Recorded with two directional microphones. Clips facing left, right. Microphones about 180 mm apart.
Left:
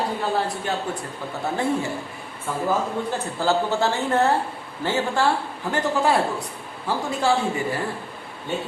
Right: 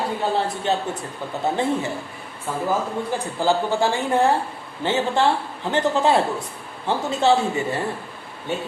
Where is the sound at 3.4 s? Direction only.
15° right (ahead or behind).